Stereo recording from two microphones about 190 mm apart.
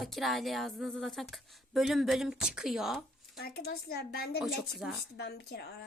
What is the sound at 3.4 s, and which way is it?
Speech, 50° left (ahead or behind).